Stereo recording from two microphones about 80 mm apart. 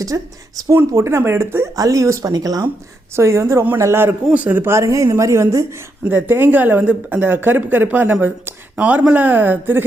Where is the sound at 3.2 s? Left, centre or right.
Right.